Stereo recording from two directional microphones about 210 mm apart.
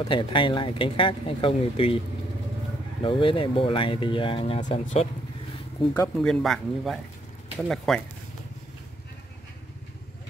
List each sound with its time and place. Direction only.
0.0 s speech: 25° left (ahead or behind)
3.0 s speech: 25° left (ahead or behind)
6.2 s speech: centre (ahead or behind)